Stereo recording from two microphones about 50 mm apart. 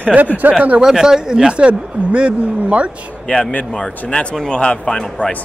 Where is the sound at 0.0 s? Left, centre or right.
Right.